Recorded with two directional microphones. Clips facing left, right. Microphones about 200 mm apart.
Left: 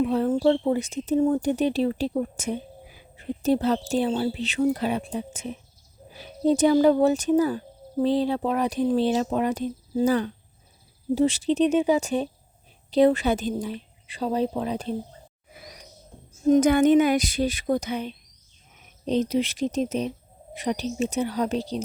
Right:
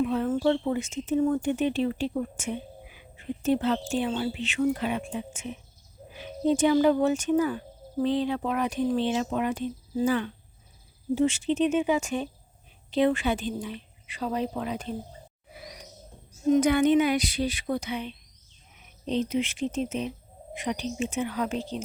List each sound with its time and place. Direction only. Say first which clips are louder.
0.0 s speech: left 4 dB; 35° left (ahead or behind)
16.5 s speech: left 3 dB; 45° left (ahead or behind)